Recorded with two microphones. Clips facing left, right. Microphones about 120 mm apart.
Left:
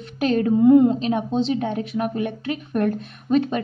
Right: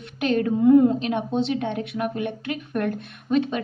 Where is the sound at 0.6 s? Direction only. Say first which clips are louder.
Left 1 dB; 25° left (ahead or behind).